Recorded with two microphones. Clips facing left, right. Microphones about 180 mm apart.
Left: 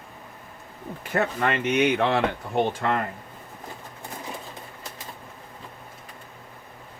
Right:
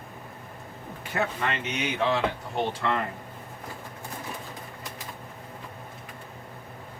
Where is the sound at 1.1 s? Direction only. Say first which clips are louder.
Left 5 dB; 50° left (ahead or behind).